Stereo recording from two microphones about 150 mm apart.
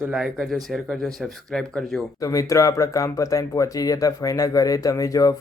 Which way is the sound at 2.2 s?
25° left (ahead or behind).